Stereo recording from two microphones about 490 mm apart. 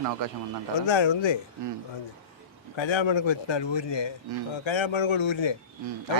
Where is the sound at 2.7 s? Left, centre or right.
Left.